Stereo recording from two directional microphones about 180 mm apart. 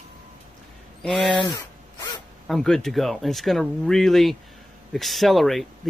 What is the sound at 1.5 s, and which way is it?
Zipper, 20° left (ahead or behind).